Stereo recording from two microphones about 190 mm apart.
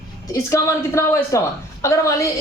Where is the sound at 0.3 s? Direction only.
15° left (ahead or behind).